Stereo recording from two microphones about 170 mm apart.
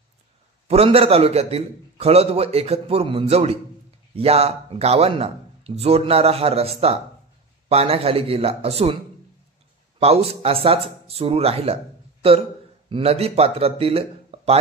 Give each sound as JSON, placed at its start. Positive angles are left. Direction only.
{"t": 0.7, "sound": "a man's voice", "side_deg": -35}
{"t": 9.9, "sound": "a man's voice", "side_deg": -35}